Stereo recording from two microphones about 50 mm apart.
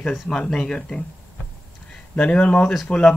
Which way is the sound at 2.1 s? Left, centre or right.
Left.